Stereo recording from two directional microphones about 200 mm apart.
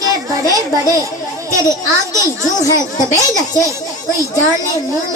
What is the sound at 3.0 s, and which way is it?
Speech, 15° left (ahead or behind).